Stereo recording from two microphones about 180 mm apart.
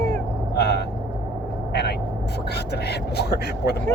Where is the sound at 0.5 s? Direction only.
65° left (ahead or behind).